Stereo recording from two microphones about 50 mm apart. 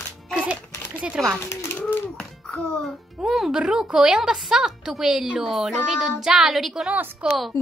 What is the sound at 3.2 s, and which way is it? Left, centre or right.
A woman's voice, centre.